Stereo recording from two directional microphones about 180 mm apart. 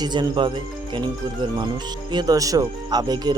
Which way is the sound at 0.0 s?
25° right (ahead or behind).